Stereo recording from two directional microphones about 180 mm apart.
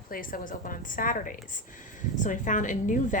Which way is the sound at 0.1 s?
50° left (ahead or behind).